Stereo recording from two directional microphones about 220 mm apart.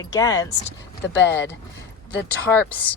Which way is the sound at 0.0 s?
15° left (ahead or behind).